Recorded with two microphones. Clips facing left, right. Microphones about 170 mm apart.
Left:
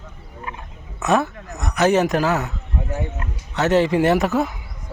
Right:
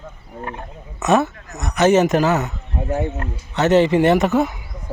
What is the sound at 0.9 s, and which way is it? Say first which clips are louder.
Speech: right 2 dB; centre (ahead or behind).